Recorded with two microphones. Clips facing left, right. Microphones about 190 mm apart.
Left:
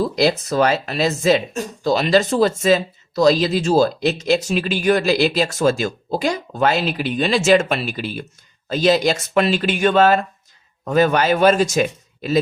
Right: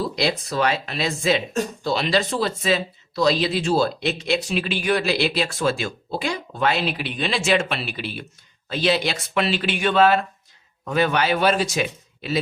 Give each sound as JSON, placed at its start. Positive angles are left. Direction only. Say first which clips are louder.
{"t": 0.4, "sound": "speech", "louder": "left 5 dB", "side_deg": 45}